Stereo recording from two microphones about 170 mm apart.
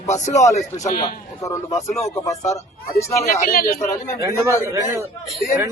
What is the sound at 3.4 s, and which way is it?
Speech, 60° left (ahead or behind).